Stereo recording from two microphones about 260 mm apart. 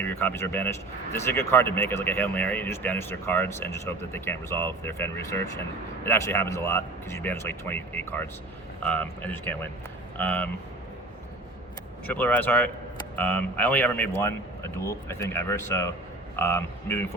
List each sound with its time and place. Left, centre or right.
0.0 s speech: centre
12.0 s a man's voice: centre